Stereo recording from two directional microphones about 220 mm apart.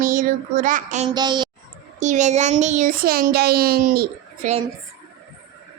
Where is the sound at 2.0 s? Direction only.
35° right (ahead or behind).